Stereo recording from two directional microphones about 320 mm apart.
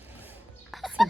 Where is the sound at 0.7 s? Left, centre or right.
Centre.